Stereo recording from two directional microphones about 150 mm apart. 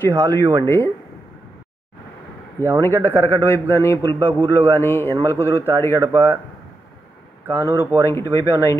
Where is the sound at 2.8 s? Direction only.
15° left (ahead or behind).